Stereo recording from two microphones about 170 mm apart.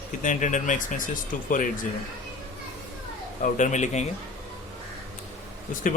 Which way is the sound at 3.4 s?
45° left (ahead or behind).